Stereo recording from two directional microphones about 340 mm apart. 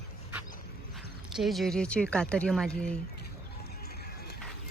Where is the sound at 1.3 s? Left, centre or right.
Centre.